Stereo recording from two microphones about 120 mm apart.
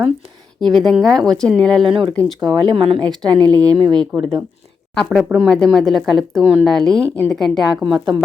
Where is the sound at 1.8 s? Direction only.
45° right (ahead or behind).